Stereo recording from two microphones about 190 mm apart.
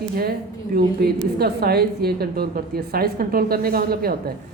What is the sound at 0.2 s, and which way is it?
A woman's voice, 55° right (ahead or behind).